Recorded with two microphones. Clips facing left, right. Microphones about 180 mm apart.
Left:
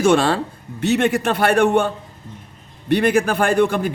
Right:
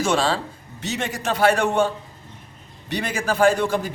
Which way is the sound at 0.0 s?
55° left (ahead or behind).